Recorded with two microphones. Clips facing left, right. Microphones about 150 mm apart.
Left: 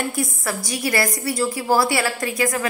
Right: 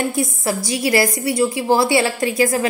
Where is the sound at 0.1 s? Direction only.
25° right (ahead or behind).